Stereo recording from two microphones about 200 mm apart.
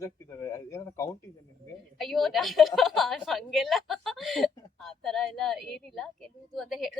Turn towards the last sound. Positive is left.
turn(degrees=0)  # may be behind; listen again after turning